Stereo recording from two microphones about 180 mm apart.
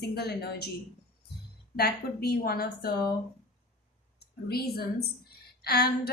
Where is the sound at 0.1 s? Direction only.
60° left (ahead or behind).